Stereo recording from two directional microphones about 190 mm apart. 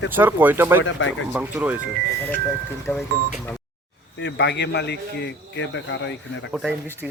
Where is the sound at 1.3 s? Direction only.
10° right (ahead or behind).